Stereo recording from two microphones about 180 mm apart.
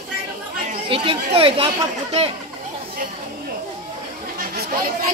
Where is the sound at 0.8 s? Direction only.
30° right (ahead or behind).